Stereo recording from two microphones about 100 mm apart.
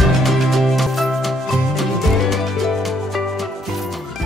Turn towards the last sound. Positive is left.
turn(degrees=0)  # may be behind; listen again after turning